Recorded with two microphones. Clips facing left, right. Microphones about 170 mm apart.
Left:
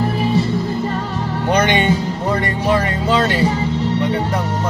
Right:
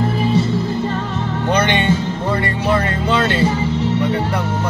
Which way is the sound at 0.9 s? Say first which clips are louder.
Even; 35° left (ahead or behind).